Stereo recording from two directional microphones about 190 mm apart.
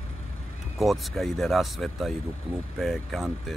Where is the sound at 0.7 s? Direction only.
Centre (ahead or behind).